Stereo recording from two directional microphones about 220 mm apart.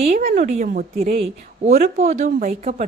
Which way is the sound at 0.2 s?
40° right (ahead or behind).